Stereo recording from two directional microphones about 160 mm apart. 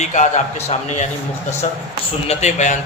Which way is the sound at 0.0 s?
50° left (ahead or behind).